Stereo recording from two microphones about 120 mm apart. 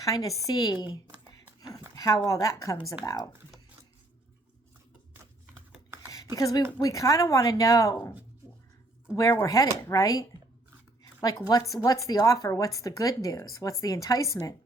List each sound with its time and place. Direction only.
0.0 s a woman's voice: 30° left (ahead or behind)
2.0 s speech: 25° left (ahead or behind)
6.3 s speech: 30° left (ahead or behind)
9.4 s speech: 30° left (ahead or behind)
11.0 s a sound: 30° left (ahead or behind)
11.4 s speech: 30° left (ahead or behind)